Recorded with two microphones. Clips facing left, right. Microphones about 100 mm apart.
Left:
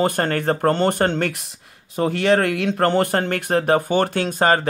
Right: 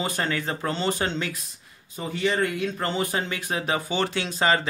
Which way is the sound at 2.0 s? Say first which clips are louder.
Left 7 dB; 75° left (ahead or behind).